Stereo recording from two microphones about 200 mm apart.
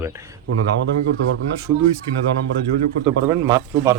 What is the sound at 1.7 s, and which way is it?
Speech, 25° right (ahead or behind).